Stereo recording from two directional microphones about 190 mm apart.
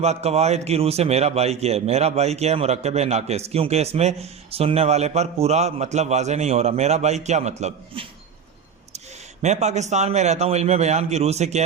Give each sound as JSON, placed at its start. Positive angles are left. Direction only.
{"t": 0.0, "sound": "a man's voice", "side_deg": -35}
{"t": 9.4, "sound": "a man's voice", "side_deg": -35}